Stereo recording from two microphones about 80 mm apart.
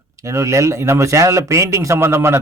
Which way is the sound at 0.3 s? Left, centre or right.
Right.